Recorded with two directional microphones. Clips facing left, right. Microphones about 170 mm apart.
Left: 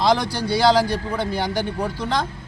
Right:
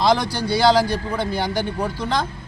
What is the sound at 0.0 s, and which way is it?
Speech, 5° right (ahead or behind).